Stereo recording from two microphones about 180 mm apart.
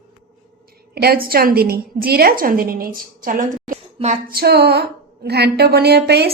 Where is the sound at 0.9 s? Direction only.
60° right (ahead or behind).